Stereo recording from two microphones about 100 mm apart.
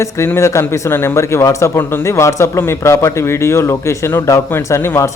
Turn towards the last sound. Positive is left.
turn(degrees=25)  # may be behind; listen again after turning